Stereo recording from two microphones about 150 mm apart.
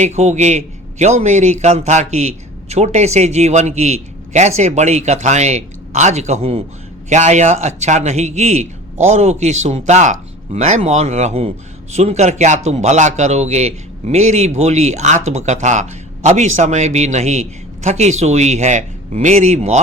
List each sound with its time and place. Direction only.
0.0 s a man's voice: 50° right (ahead or behind)